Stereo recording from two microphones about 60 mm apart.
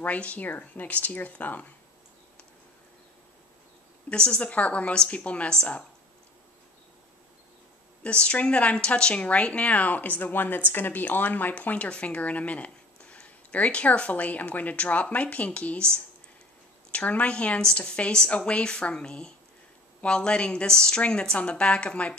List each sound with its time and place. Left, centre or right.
0.0 s speech: left
4.1 s speech: centre
8.0 s speech: centre
16.9 s a woman's voice: left